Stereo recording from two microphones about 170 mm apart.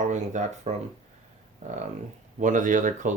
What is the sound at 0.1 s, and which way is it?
Speech, 45° right (ahead or behind).